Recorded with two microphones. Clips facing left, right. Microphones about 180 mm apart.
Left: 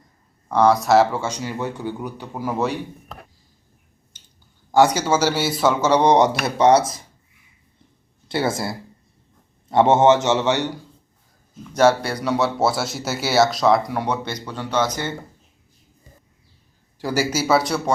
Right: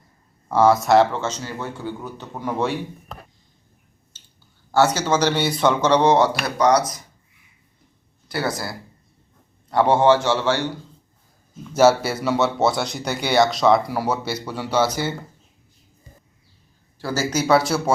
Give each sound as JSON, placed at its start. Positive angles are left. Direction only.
{"t": 0.4, "sound": "speech", "side_deg": -5}
{"t": 4.1, "sound": "a sound", "side_deg": 15}
{"t": 4.7, "sound": "speech", "side_deg": 15}
{"t": 8.3, "sound": "a man's voice", "side_deg": 25}
{"t": 11.7, "sound": "speech", "side_deg": -5}
{"t": 17.0, "sound": "speech", "side_deg": 15}